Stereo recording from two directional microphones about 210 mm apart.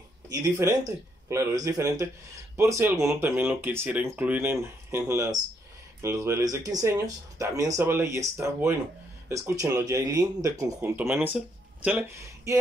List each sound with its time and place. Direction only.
0.3 s speech: 15° right (ahead or behind)